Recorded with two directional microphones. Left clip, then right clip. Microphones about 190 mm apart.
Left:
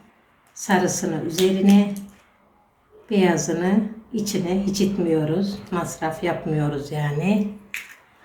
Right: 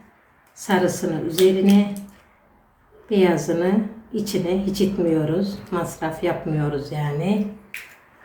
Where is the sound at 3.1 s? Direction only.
25° left (ahead or behind); by 7.8 s 40° left (ahead or behind).